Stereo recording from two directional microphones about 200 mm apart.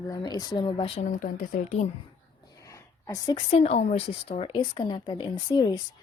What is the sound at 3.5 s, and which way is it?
A woman's voice, 30° left (ahead or behind).